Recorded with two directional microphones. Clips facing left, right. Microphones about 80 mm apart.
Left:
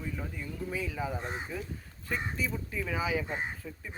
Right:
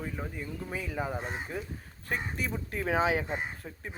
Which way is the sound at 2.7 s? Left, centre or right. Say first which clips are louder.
Right 6 dB; right.